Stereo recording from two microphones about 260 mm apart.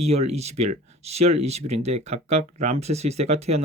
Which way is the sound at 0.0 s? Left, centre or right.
Right.